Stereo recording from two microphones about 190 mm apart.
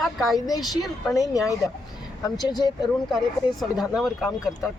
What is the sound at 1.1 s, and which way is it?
Speech, 15° left (ahead or behind).